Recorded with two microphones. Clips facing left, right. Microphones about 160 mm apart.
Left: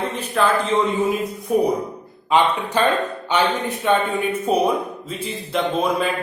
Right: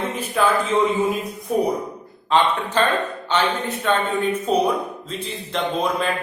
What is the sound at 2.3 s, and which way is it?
Speech, 10° left (ahead or behind).